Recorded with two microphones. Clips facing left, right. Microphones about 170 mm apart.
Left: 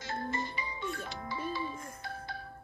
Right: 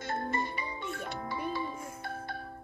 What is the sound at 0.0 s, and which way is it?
Music, 55° right (ahead or behind).